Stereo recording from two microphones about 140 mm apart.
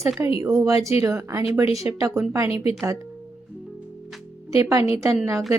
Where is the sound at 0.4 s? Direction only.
20° right (ahead or behind).